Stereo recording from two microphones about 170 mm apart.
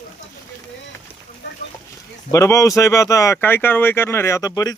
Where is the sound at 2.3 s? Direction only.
20° left (ahead or behind).